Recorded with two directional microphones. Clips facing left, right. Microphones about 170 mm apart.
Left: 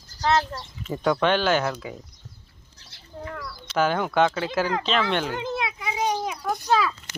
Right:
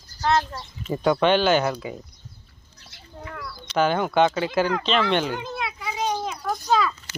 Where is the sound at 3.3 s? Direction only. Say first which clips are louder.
Right 2 dB; centre (ahead or behind).